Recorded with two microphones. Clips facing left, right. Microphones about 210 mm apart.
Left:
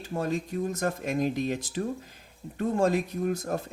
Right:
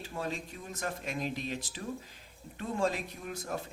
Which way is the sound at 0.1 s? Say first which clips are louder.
Left 9 dB; 45° left (ahead or behind).